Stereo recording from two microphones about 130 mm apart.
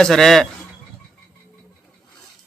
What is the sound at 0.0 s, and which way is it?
Speech, centre (ahead or behind).